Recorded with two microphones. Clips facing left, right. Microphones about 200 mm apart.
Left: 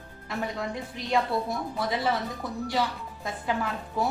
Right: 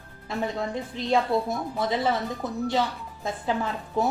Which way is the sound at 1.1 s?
20° right (ahead or behind).